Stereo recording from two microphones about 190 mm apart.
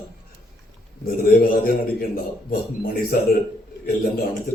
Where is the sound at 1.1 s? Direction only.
55° left (ahead or behind).